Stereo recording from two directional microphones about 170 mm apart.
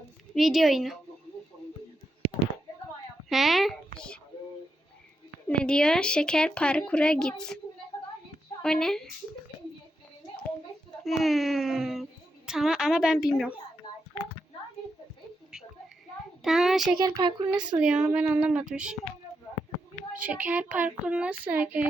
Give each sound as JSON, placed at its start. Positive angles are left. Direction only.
{"t": 0.3, "sound": "speech", "side_deg": 0}
{"t": 3.2, "sound": "a woman's voice", "side_deg": 0}
{"t": 5.5, "sound": "speech", "side_deg": 5}
{"t": 8.6, "sound": "speech", "side_deg": 5}
{"t": 11.0, "sound": "speech", "side_deg": 0}
{"t": 16.4, "sound": "speech", "side_deg": 0}
{"t": 17.0, "sound": "speech", "side_deg": -20}
{"t": 17.7, "sound": "speech", "side_deg": -5}
{"t": 20.1, "sound": "speech", "side_deg": -10}